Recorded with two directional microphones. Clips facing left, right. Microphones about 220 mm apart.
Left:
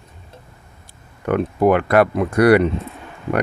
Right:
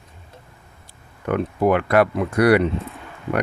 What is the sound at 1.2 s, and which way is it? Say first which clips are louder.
Speech: left 3 dB; 50° left (ahead or behind).